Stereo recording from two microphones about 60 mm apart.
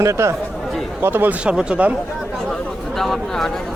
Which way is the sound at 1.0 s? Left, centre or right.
Right.